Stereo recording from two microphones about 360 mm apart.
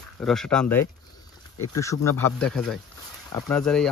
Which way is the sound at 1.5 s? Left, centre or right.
Left.